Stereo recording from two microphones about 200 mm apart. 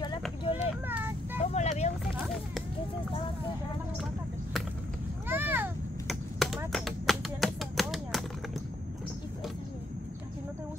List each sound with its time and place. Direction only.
0.4 s a sound: 25° left (ahead or behind)
0.8 s vehicle: 10° right (ahead or behind)
1.4 s vehicle: 35° left (ahead or behind)
2.1 s run: centre (ahead or behind)
5.3 s vehicle: 10° right (ahead or behind)
6.0 s chop: centre (ahead or behind)
6.7 s a sound: centre (ahead or behind)